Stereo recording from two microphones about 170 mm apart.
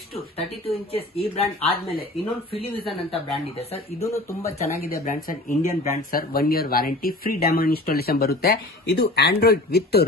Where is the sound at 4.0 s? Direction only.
15° left (ahead or behind).